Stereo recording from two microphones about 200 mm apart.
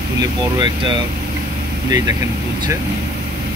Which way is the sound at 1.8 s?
15° right (ahead or behind).